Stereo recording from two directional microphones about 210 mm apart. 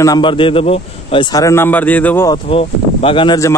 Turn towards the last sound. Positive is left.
turn(degrees=20)  # may be behind; listen again after turning